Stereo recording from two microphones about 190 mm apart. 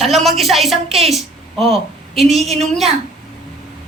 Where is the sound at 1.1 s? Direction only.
Centre (ahead or behind).